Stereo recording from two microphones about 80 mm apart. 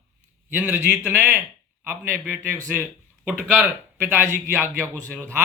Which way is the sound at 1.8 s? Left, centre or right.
Right.